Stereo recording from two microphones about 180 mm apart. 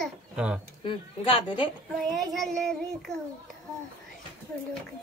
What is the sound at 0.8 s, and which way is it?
Speech, 30° left (ahead or behind).